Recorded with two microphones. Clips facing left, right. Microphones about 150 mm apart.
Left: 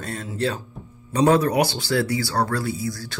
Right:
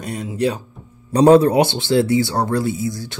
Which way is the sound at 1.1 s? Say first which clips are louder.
Right 7 dB; 30° right (ahead or behind).